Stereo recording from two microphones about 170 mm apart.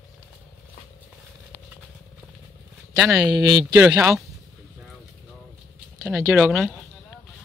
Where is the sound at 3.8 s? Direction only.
5° right (ahead or behind).